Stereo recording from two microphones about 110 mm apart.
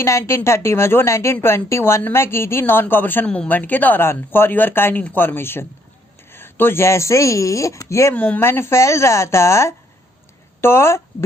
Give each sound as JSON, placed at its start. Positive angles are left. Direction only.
{"t": 0.0, "sound": "a woman's voice", "side_deg": 25}
{"t": 8.1, "sound": "a woman's voice", "side_deg": 15}